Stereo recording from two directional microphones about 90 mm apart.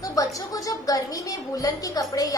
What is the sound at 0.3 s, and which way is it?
A woman's voice, 40° left (ahead or behind).